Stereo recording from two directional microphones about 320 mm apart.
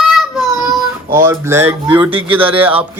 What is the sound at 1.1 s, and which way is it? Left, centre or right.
Speech, centre.